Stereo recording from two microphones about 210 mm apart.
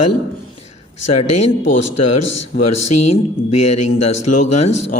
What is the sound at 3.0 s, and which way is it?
A man's voice, 30° left (ahead or behind).